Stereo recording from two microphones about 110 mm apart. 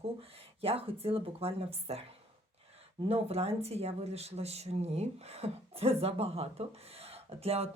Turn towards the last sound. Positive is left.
turn(degrees=-65)  # may be behind; listen again after turning